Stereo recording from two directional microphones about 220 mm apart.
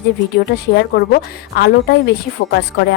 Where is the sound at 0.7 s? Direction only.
45° left (ahead or behind).